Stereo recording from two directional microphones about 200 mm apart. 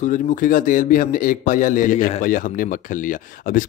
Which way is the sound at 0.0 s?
40° left (ahead or behind).